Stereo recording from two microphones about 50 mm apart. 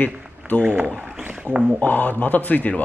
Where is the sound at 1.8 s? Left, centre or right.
Left.